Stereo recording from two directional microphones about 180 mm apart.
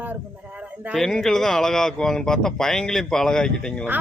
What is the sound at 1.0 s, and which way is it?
Speech, centre (ahead or behind).